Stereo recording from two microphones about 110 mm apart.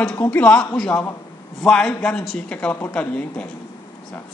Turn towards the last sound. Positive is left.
turn(degrees=10)  # may be behind; listen again after turning